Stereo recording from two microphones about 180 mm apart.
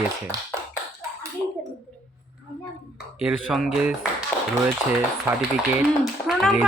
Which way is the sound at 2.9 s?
5° right (ahead or behind).